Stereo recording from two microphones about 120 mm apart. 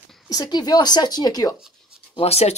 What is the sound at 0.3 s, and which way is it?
A woman's voice, 35° left (ahead or behind).